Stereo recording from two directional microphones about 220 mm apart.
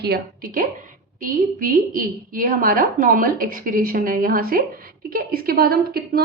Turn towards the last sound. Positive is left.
turn(degrees=-45)  # may be behind; listen again after turning